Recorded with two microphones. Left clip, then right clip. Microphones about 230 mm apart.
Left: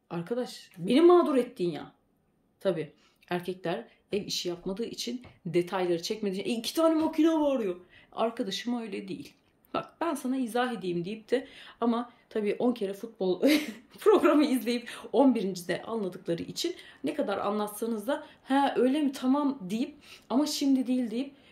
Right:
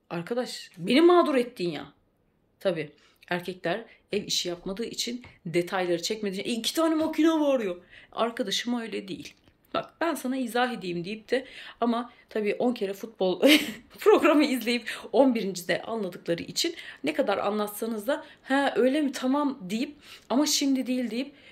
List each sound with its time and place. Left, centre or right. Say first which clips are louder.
0.1 s speech: right 3 dB; centre